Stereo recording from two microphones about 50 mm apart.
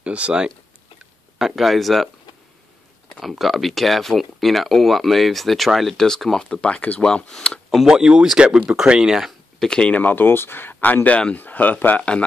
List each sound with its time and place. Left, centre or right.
0.0 s speech: right
1.4 s speech: centre
3.2 s speech: centre
6.5 s speech: left
7.0 s speech: centre
7.8 s speech: centre
9.6 s speech: centre
9.9 s speech: left
11.1 s speech: left
11.3 s speech: left
12.0 s speech: left